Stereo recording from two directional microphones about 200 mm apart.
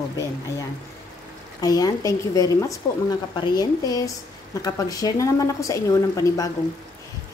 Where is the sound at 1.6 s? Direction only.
20° left (ahead or behind).